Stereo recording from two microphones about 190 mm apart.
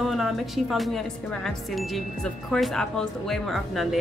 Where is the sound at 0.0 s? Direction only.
Centre (ahead or behind).